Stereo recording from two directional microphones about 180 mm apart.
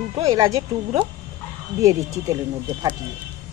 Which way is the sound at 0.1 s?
20° right (ahead or behind).